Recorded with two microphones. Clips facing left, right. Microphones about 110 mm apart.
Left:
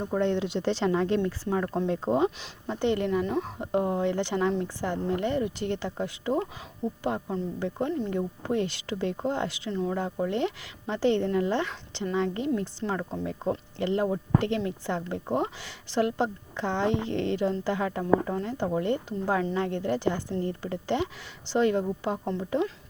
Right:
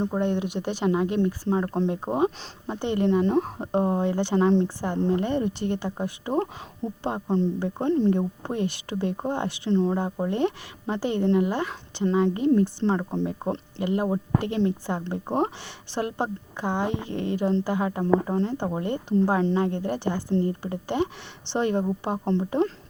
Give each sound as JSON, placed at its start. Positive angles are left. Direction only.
{"t": 0.0, "sound": "speech", "side_deg": -20}
{"t": 8.2, "sound": "speech", "side_deg": -20}